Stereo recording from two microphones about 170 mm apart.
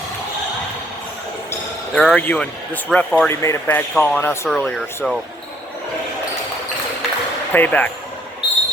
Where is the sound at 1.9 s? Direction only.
5° left (ahead or behind).